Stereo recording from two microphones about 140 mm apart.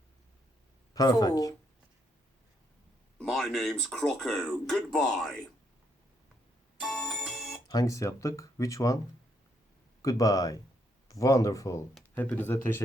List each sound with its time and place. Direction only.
0.9 s speech: 25° left (ahead or behind)
3.2 s speech: centre (ahead or behind)
6.7 s music: centre (ahead or behind)
7.7 s speech: 25° left (ahead or behind)
10.0 s speech: 25° left (ahead or behind)
12.1 s speech: 10° left (ahead or behind)